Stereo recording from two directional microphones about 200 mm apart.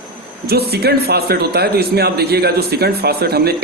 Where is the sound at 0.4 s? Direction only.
50° right (ahead or behind).